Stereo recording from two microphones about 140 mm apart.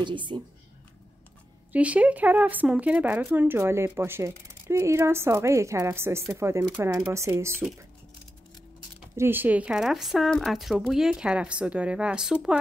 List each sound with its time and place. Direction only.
0.0 s a woman's voice: 35° right (ahead or behind)
1.7 s speech: 10° right (ahead or behind)
9.1 s speech: 15° right (ahead or behind)